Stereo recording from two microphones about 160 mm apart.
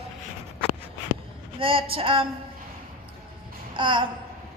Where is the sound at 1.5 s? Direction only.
35° right (ahead or behind).